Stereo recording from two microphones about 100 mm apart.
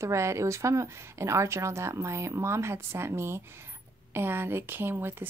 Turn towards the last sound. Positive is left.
turn(degrees=-25)  # may be behind; listen again after turning